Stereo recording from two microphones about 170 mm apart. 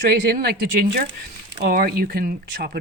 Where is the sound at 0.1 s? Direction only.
65° right (ahead or behind).